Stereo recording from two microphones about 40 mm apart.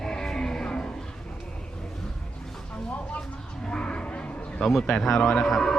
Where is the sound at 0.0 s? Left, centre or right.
Centre.